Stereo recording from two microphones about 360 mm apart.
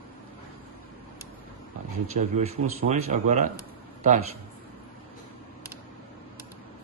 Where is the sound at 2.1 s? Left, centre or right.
Centre.